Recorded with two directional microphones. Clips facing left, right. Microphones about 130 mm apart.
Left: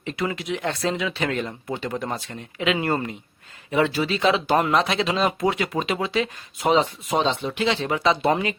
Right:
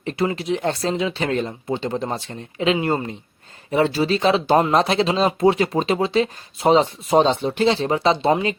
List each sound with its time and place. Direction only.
0.0 s speech: 35° right (ahead or behind)
3.7 s speech: 35° right (ahead or behind)